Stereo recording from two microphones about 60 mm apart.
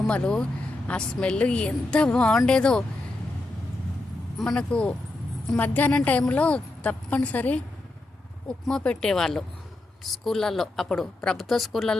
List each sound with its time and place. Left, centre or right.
0.1 s a woman's voice: centre
4.5 s a woman's voice: centre
5.5 s a woman's voice: left
8.4 s a woman's voice: centre